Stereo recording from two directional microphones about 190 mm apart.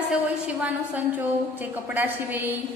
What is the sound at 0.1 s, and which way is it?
A woman's voice, 5° right (ahead or behind).